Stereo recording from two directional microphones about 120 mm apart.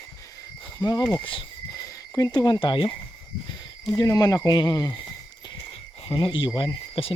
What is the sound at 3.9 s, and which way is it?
Speech, 30° left (ahead or behind).